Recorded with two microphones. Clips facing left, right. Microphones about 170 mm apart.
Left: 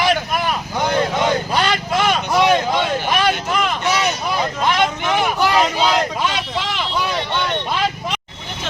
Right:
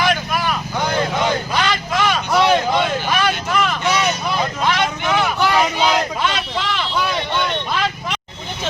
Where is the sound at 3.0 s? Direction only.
20° left (ahead or behind).